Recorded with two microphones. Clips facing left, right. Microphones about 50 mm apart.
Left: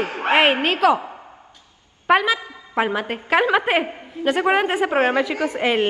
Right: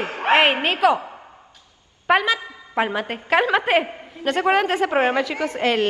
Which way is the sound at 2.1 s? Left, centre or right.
Centre.